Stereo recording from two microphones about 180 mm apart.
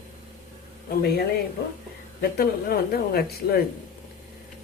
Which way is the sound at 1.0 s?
60° left (ahead or behind).